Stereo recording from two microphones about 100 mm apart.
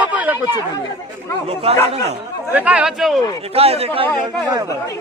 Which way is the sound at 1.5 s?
80° right.